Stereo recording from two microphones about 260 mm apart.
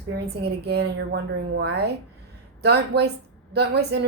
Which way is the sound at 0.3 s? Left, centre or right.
Right.